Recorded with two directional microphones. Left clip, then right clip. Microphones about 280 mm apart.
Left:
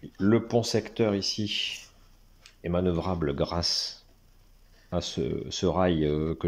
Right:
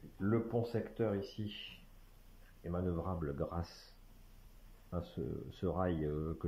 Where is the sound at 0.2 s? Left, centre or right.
Left.